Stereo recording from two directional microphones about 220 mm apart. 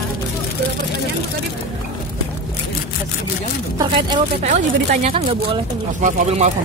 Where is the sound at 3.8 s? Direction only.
20° right (ahead or behind).